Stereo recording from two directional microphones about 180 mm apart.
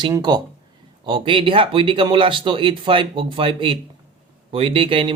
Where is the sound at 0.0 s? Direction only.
25° right (ahead or behind).